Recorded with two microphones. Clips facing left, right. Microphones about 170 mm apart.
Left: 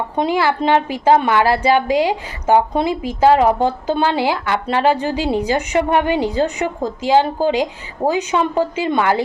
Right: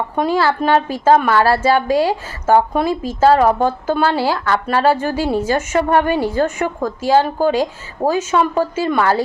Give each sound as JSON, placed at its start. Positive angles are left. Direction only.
{"t": 0.2, "sound": "a woman's voice", "side_deg": 15}